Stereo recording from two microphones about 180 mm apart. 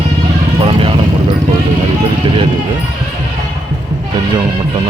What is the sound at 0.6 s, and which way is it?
Vehicle, 30° right (ahead or behind).